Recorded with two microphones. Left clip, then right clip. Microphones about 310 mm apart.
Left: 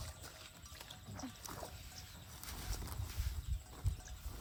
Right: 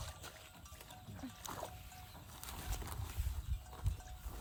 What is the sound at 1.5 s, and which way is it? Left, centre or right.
Music, right.